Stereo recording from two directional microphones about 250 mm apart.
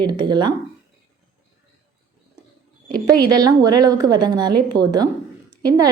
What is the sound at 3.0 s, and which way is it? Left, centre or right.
A woman's voice, centre.